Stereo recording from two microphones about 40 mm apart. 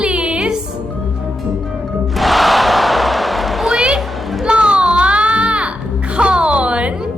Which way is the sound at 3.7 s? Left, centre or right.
Centre.